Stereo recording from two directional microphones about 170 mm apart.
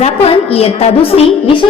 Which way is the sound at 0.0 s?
35° left (ahead or behind).